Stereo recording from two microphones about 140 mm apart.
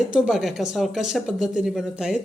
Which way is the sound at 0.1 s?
5° right (ahead or behind).